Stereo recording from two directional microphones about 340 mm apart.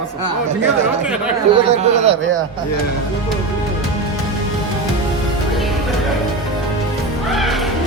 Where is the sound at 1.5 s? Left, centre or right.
Centre.